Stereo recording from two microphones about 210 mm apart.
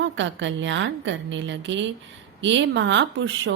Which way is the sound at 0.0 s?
60° right (ahead or behind).